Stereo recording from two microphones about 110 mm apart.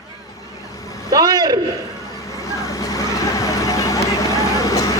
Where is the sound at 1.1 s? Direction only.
35° right (ahead or behind).